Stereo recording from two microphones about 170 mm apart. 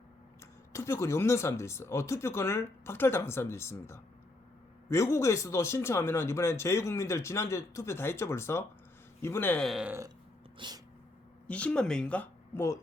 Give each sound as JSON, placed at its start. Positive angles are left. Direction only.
{"t": 0.7, "sound": "speech", "side_deg": 15}
{"t": 9.6, "sound": "speech", "side_deg": -5}
{"t": 10.6, "sound": "sneeze", "side_deg": -25}
{"t": 11.4, "sound": "speech", "side_deg": 5}